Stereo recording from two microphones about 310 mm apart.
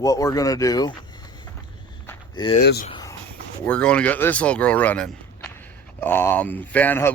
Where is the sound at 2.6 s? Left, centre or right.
Left.